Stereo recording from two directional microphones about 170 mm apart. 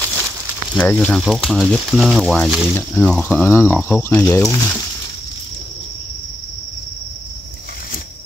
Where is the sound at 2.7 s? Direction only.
10° left (ahead or behind).